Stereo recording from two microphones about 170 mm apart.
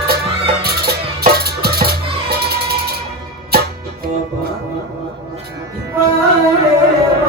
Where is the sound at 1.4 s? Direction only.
65° right (ahead or behind).